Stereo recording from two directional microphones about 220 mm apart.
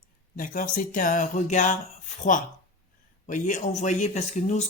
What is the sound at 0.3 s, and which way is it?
Speech, 40° left (ahead or behind).